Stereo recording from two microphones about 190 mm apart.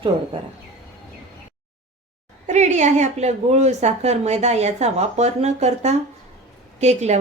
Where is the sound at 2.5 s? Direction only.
40° right (ahead or behind).